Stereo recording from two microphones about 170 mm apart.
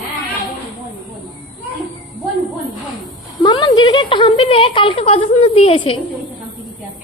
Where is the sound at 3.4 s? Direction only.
25° left (ahead or behind).